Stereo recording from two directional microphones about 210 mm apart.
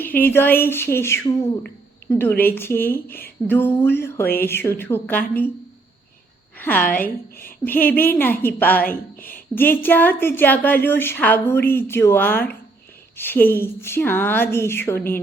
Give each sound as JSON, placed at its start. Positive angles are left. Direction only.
{"t": 0.0, "sound": "speech", "side_deg": 10}
{"t": 6.6, "sound": "a woman's voice", "side_deg": 10}
{"t": 8.9, "sound": "speech", "side_deg": 40}
{"t": 9.6, "sound": "speech", "side_deg": 10}